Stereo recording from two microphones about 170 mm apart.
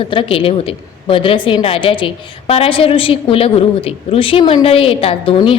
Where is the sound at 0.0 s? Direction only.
30° left (ahead or behind).